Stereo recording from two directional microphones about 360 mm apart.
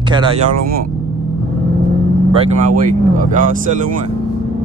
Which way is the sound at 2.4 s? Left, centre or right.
Right.